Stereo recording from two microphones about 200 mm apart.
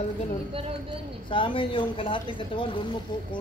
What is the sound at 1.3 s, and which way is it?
A woman's voice, 25° left (ahead or behind).